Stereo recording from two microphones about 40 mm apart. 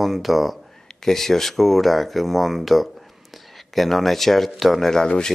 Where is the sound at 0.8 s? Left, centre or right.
Centre.